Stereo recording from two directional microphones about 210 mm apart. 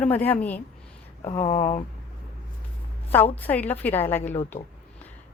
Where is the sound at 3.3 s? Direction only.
10° left (ahead or behind).